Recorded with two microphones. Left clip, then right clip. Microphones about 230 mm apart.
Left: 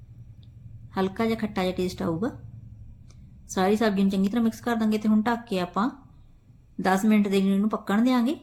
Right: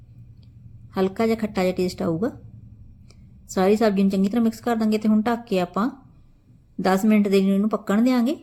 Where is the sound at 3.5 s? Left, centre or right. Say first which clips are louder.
Right 4 dB; centre.